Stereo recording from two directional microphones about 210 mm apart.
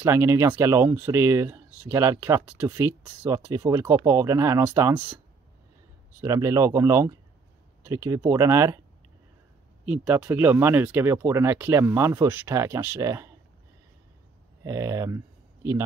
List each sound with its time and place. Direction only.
0.0 s speech: 10° right (ahead or behind)
6.2 s speech: 15° right (ahead or behind)
9.8 s speech: 10° right (ahead or behind)
14.6 s speech: 15° right (ahead or behind)